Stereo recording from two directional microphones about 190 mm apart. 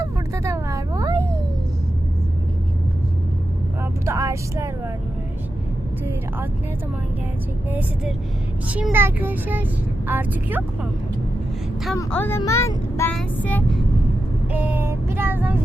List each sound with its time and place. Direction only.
0.0 s vehicle: 15° right (ahead or behind)
4.0 s vehicle: 15° right (ahead or behind)
7.7 s speech: 10° right (ahead or behind)
11.9 s child singing: 10° left (ahead or behind)
14.5 s speech: 10° right (ahead or behind)